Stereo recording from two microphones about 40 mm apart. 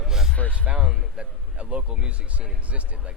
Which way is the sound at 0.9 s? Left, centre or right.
Right.